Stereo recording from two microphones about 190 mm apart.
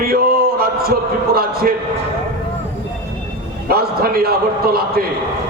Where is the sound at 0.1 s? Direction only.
55° right (ahead or behind).